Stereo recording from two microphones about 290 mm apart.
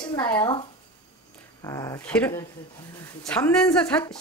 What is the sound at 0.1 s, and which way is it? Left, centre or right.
Speech, centre.